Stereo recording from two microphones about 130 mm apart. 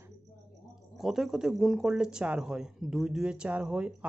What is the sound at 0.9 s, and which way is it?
Speech, 5° right (ahead or behind).